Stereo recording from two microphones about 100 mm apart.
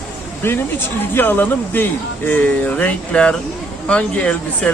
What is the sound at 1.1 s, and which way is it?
Speech, 20° left (ahead or behind).